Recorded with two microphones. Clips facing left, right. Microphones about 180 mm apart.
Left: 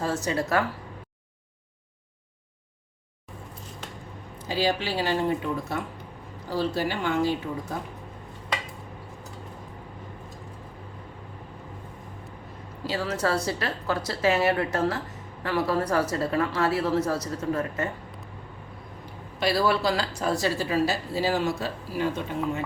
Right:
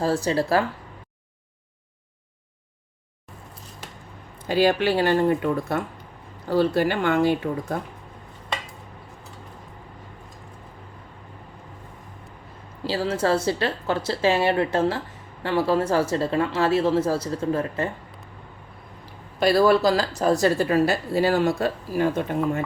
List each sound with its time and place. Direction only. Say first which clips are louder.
0.0 s speech: right 5 dB; 35° right (ahead or behind)
4.4 s speech: right 7 dB; 55° right (ahead or behind)
12.8 s speech: right 4 dB; 30° right (ahead or behind)
19.4 s a woman's voice: right 6 dB; 50° right (ahead or behind)